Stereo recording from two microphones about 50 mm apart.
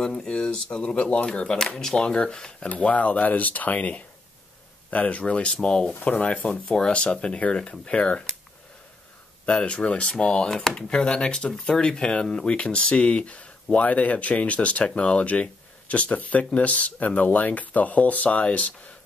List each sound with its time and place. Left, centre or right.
0.0 s speech: centre
2.7 s speech: left
6.0 s speech: left
9.5 s speech: centre